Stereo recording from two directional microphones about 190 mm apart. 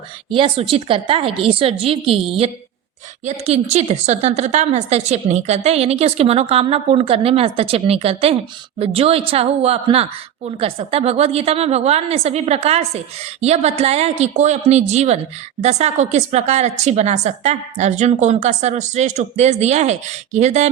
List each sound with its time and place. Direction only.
0.3 s a woman's voice: 30° right (ahead or behind)